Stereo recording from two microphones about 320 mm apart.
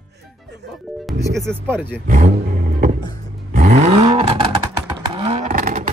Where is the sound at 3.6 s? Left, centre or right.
Right.